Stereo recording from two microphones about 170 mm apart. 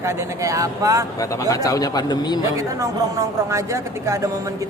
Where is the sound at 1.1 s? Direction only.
20° left (ahead or behind).